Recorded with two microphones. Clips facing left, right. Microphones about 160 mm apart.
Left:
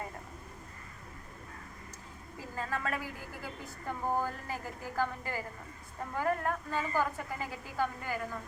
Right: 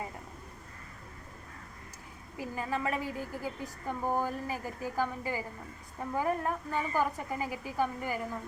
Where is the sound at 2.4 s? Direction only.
15° right (ahead or behind).